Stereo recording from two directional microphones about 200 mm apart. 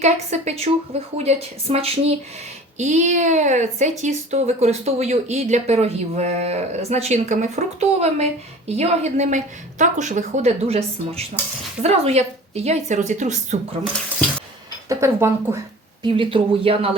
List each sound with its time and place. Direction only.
0.0 s a woman's voice: 35° right (ahead or behind)
14.8 s speech: 15° right (ahead or behind)
16.0 s speech: 25° right (ahead or behind)